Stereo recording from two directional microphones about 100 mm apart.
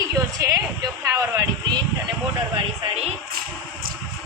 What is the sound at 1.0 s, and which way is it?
Speech, 35° right (ahead or behind).